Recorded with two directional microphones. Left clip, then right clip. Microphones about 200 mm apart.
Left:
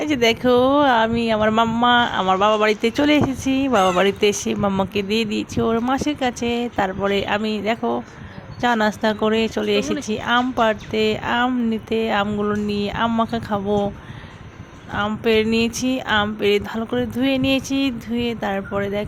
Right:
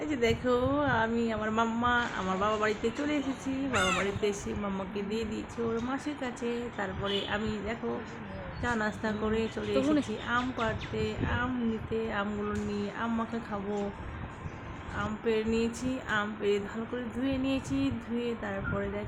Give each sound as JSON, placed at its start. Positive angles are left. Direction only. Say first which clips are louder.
{"t": 0.0, "sound": "speech", "louder": "left 11 dB", "side_deg": 45}
{"t": 14.9, "sound": "speech", "louder": "left 12 dB", "side_deg": 45}